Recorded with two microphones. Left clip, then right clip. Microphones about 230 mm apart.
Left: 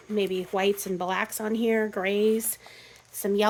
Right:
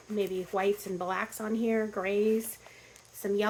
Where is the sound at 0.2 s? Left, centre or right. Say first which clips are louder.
Left 4 dB; left.